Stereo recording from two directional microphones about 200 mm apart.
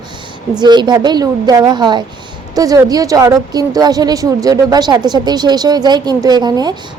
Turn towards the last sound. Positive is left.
turn(degrees=-20)  # may be behind; listen again after turning